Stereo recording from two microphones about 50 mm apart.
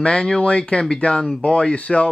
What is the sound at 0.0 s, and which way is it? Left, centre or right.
Speech, centre.